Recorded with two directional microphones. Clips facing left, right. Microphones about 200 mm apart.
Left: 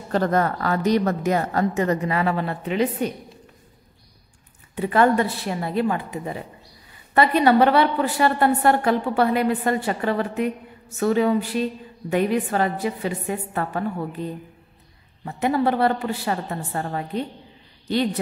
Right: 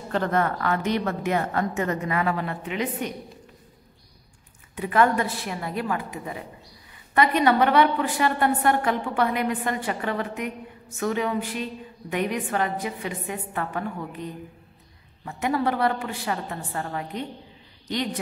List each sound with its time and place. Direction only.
0.1 s a woman's voice: 40° left (ahead or behind)
4.7 s a woman's voice: 35° left (ahead or behind)
7.2 s a woman's voice: 35° left (ahead or behind)